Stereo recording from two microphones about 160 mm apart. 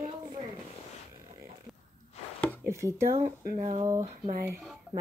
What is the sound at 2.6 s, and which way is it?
Speech, 15° right (ahead or behind).